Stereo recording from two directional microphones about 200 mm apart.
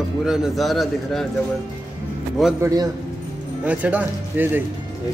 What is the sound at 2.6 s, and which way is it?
Speech, 20° right (ahead or behind).